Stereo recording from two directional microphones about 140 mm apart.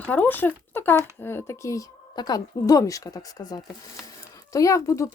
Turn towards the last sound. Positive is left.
turn(degrees=25)  # may be behind; listen again after turning